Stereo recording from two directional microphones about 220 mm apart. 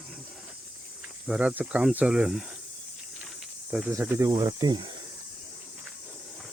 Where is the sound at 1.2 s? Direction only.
5° right (ahead or behind).